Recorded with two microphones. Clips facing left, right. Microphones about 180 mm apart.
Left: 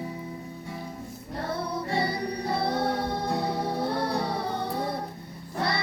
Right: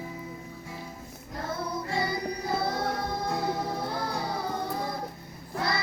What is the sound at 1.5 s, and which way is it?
Music, 30° left (ahead or behind).